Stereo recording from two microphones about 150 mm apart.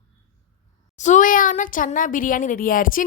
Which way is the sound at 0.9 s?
50° left (ahead or behind).